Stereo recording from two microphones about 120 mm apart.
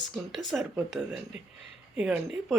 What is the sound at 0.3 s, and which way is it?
Speech, centre (ahead or behind).